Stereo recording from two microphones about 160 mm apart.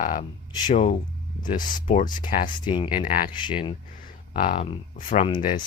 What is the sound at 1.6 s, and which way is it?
Speech, 55° left (ahead or behind).